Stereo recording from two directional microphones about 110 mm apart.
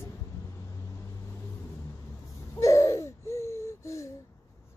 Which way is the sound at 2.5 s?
30° left (ahead or behind).